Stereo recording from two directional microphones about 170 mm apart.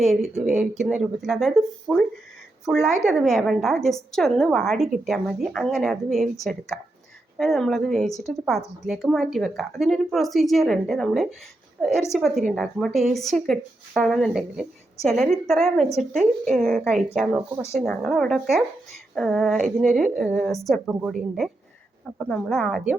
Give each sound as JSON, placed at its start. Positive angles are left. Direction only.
{"t": 0.0, "sound": "a woman's voice", "side_deg": 0}